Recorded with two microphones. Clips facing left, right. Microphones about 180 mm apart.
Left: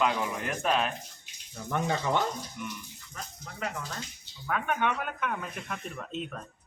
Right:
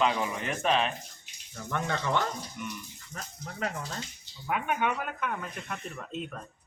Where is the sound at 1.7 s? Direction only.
10° left (ahead or behind).